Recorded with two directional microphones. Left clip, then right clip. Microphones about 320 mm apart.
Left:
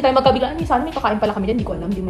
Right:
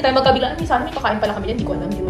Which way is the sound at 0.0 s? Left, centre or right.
Left.